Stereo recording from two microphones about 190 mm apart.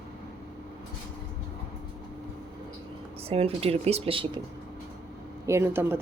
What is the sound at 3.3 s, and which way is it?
Speech, 30° right (ahead or behind).